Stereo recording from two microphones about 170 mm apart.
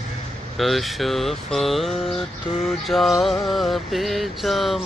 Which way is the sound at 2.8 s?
Centre (ahead or behind).